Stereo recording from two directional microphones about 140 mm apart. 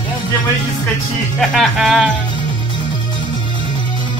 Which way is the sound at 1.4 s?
Centre (ahead or behind).